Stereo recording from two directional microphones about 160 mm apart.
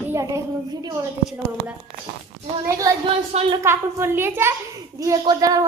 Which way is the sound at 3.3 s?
40° right (ahead or behind).